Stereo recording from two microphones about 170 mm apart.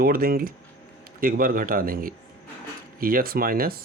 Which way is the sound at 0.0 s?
60° right (ahead or behind).